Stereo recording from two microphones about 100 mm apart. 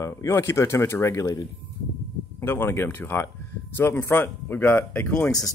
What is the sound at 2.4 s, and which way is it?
Speech, 25° left (ahead or behind).